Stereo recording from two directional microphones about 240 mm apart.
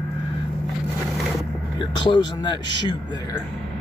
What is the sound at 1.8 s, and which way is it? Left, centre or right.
Speech, centre.